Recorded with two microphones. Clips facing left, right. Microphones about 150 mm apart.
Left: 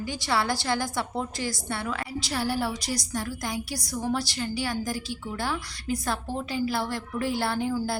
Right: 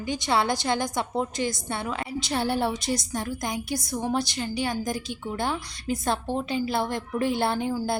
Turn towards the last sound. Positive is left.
turn(degrees=-20)  # may be behind; listen again after turning